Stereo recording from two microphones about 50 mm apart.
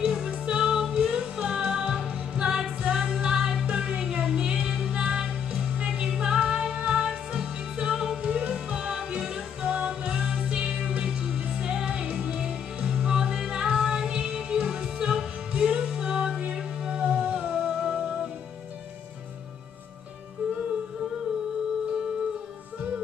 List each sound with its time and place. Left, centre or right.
0.0 s music: centre
20.4 s music: right